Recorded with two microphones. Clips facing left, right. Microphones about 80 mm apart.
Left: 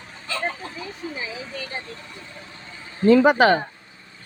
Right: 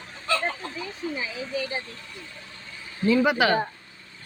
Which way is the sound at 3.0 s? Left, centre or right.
Left.